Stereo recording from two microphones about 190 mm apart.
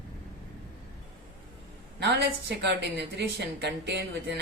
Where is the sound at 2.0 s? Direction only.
65° right (ahead or behind).